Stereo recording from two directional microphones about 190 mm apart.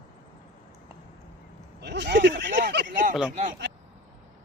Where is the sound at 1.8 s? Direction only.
65° right (ahead or behind).